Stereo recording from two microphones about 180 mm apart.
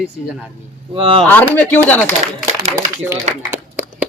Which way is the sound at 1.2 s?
10° left (ahead or behind).